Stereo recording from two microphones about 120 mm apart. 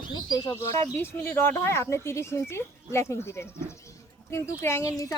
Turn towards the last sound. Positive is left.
turn(degrees=25)  # may be behind; listen again after turning